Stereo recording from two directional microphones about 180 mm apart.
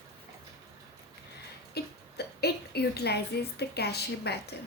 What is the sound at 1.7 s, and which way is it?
A woman's voice, 65° left (ahead or behind).